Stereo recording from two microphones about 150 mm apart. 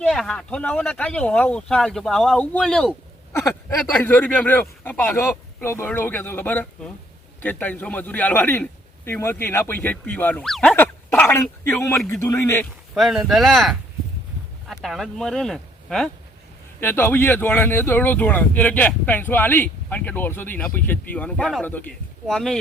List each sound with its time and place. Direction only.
0.0 s speech: 5° left (ahead or behind)
3.3 s a sound: 20° left (ahead or behind)
3.9 s speech: 10° left (ahead or behind)
12.9 s speech: 5° right (ahead or behind)
16.8 s speech: 15° left (ahead or behind)